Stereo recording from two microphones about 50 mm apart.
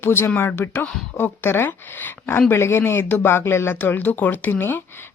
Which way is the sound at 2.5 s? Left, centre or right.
Left.